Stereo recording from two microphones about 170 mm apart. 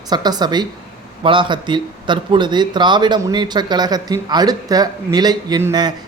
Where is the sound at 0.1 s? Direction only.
25° right (ahead or behind).